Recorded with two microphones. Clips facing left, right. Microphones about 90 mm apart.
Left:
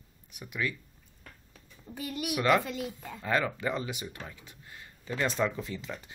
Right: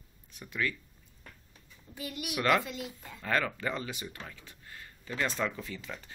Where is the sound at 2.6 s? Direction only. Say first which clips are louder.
Left 4 dB; 50° left (ahead or behind).